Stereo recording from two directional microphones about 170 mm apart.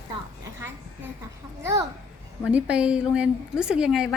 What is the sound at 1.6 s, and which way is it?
A child's voice, 15° right (ahead or behind).